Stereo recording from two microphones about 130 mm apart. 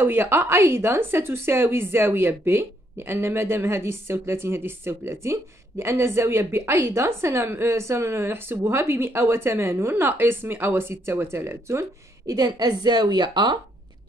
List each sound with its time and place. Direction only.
0.0 s a woman's voice: 15° right (ahead or behind)
12.3 s a woman's voice: 30° right (ahead or behind)